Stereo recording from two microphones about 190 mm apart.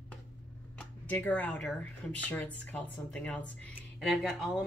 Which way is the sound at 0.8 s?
10° left (ahead or behind).